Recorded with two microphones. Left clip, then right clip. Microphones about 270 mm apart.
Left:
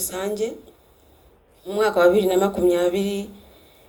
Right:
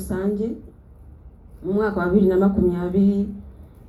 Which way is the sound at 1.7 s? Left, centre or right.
Left.